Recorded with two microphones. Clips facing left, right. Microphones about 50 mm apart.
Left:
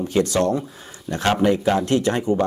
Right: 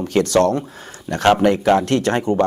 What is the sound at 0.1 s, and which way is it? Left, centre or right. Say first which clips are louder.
Speech: right 5 dB; right.